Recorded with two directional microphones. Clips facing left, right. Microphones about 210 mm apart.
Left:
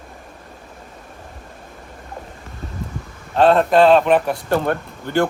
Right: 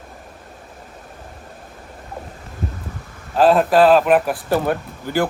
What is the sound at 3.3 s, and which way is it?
A man's voice, 5° right (ahead or behind).